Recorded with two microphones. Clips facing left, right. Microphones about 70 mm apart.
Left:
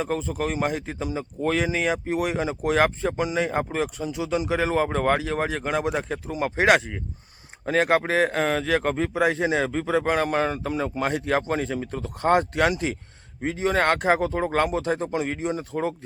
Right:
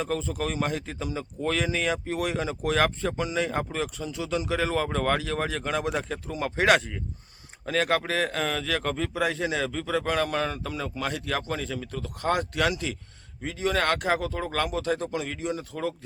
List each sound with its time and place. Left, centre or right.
0.0 s speech: centre
7.6 s speech: left